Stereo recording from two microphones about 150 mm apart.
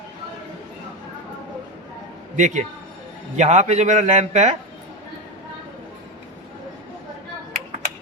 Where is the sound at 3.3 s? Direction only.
50° right (ahead or behind).